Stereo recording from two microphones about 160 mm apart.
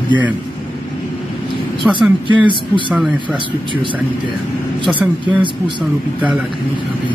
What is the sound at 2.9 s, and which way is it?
Speech, 5° right (ahead or behind).